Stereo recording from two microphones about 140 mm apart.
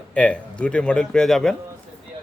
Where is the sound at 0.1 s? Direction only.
10° left (ahead or behind).